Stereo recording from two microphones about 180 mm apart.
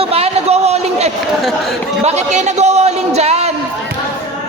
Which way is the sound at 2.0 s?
40° right (ahead or behind).